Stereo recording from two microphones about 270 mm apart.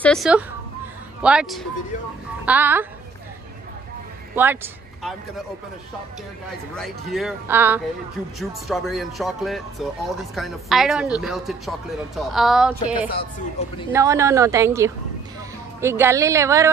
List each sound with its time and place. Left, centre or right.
0.0 s a woman's voice: centre
4.4 s a woman's voice: centre
6.8 s speech: centre
13.6 s a woman's voice: left
13.9 s a woman's voice: centre